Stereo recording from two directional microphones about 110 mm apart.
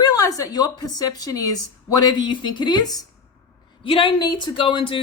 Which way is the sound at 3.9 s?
50° left (ahead or behind).